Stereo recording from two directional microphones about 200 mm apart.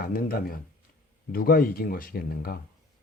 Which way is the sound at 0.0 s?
45° left (ahead or behind).